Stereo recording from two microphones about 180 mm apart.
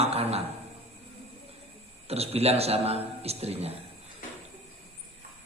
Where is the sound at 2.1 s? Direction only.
35° right (ahead or behind).